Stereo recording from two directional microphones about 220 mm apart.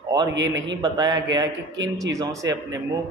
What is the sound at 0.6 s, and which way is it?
A man's voice, 20° right (ahead or behind).